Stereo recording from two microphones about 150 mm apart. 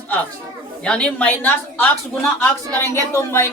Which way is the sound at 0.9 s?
10° left (ahead or behind).